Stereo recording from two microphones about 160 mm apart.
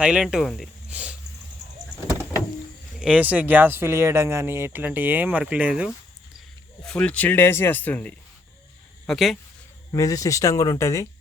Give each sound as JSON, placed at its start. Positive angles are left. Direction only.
{"t": 0.0, "sound": "speech", "side_deg": -5}
{"t": 3.0, "sound": "speech", "side_deg": -10}
{"t": 6.8, "sound": "speech", "side_deg": 10}
{"t": 9.9, "sound": "speech", "side_deg": 20}